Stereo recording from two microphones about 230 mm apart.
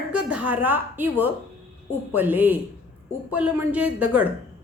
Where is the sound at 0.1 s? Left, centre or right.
Centre.